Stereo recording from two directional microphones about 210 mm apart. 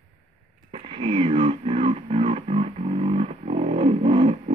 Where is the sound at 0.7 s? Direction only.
25° right (ahead or behind).